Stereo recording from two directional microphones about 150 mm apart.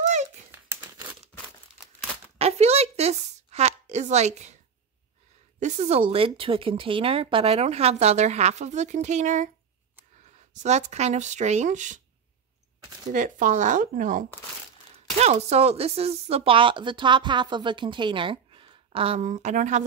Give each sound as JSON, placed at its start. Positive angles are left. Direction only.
{"t": 0.0, "sound": "a sound", "side_deg": -50}
{"t": 0.5, "sound": "crumpling", "side_deg": -15}
{"t": 2.3, "sound": "a sound", "side_deg": -45}
{"t": 5.6, "sound": "speech", "side_deg": -45}
{"t": 10.5, "sound": "speech", "side_deg": -50}
{"t": 13.1, "sound": "speech", "side_deg": -60}
{"t": 15.1, "sound": "speech", "side_deg": -45}
{"t": 19.2, "sound": "speech", "side_deg": -50}